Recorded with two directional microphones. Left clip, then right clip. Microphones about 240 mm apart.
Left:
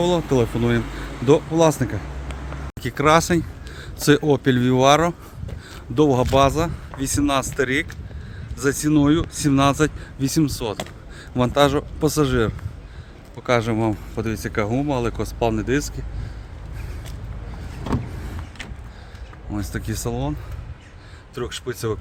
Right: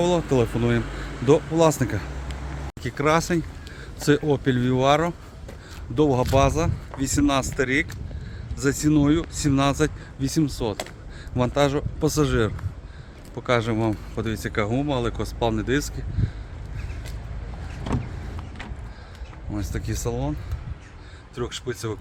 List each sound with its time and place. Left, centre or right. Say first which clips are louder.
0.0 s speech: left 2 dB; centre
2.8 s speech: left 5 dB; left
19.5 s speech: left 3 dB; centre
21.3 s speech: left 2 dB; centre